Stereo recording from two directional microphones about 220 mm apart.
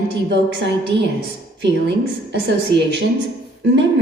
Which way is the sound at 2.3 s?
50° right (ahead or behind).